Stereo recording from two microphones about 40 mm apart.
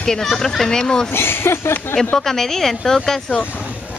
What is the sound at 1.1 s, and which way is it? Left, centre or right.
Speech, left.